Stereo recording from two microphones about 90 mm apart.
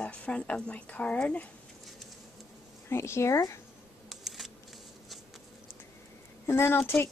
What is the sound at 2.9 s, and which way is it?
Speech, 30° left (ahead or behind).